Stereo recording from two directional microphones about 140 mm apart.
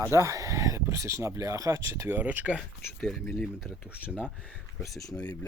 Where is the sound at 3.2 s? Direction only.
10° left (ahead or behind).